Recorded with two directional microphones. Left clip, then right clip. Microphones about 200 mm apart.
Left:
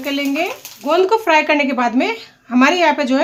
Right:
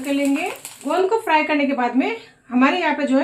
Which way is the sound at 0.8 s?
50° left (ahead or behind).